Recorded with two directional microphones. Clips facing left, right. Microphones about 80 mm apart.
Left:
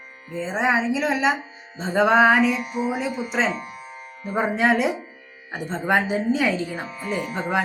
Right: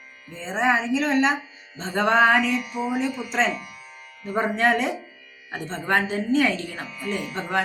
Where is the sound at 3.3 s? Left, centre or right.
Centre.